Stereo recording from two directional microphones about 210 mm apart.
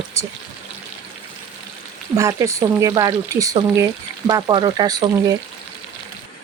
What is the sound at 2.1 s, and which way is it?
Speech, 15° right (ahead or behind).